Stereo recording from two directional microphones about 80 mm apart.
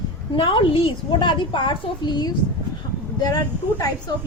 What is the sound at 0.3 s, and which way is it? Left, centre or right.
A woman's voice, left.